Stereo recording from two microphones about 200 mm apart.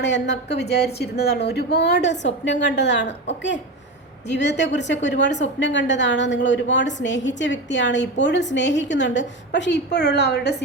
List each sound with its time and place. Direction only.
0.0 s a woman's voice: 60° left (ahead or behind)
4.3 s a woman's voice: 60° left (ahead or behind)